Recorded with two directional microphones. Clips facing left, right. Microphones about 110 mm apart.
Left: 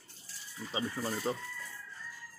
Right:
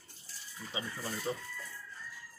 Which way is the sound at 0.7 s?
30° left (ahead or behind).